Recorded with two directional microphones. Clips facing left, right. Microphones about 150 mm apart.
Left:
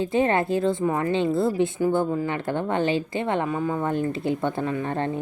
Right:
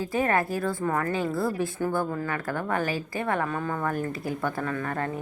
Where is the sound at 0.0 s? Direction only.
25° left (ahead or behind).